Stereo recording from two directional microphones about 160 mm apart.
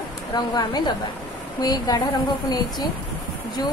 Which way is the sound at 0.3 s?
25° left (ahead or behind).